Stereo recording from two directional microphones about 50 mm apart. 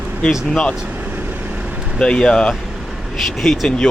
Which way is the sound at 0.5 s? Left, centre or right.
Centre.